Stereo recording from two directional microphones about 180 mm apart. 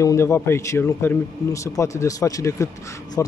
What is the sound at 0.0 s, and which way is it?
Speech, 15° left (ahead or behind).